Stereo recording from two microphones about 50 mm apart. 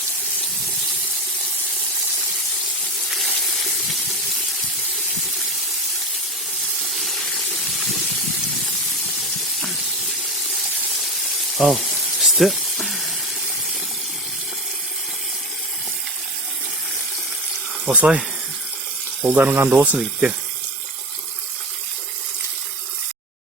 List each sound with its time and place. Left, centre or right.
3.1 s water: centre
6.8 s water: centre
11.5 s frying: centre
17.8 s speech: centre
19.2 s speech: right
19.5 s speech: right